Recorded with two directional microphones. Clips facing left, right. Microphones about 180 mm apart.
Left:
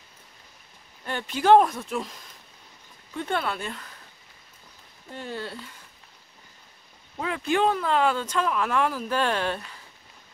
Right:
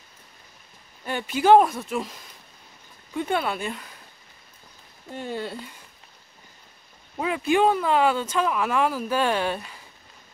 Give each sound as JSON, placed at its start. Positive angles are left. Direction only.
{"t": 1.0, "sound": "speech", "side_deg": -5}
{"t": 3.2, "sound": "speech", "side_deg": -15}
{"t": 5.1, "sound": "speech", "side_deg": -15}
{"t": 7.2, "sound": "speech", "side_deg": -10}